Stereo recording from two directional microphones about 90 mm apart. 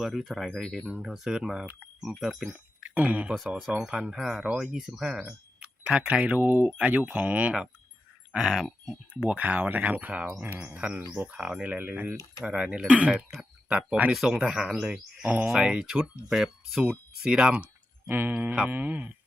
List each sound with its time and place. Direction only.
0.0 s speech: centre (ahead or behind)
2.8 s speech: 15° right (ahead or behind)
5.2 s speech: 15° right (ahead or behind)
9.3 s speech: 15° right (ahead or behind)
14.1 s speech: 5° right (ahead or behind)